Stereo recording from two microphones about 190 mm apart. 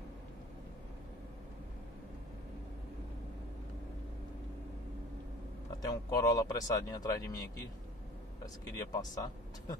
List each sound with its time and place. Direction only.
5.9 s speech: 20° left (ahead or behind)
8.9 s speech: 20° left (ahead or behind)